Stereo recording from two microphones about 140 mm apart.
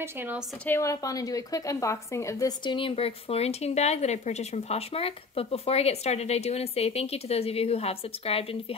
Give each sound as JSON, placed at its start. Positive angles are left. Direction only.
{"t": 0.0, "sound": "a woman's voice", "side_deg": -15}
{"t": 0.7, "sound": "a woman's voice", "side_deg": 20}
{"t": 2.6, "sound": "speech", "side_deg": 40}